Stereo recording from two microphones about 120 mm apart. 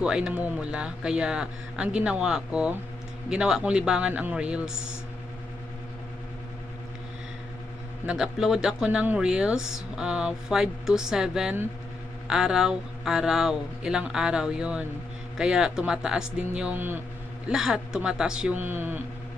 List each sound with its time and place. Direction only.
0.0 s speech: 5° right (ahead or behind)
8.1 s speech: 5° right (ahead or behind)
17.5 s speech: 5° right (ahead or behind)